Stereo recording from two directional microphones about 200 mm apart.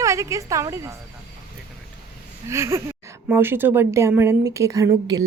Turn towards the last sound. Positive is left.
turn(degrees=-15)  # may be behind; listen again after turning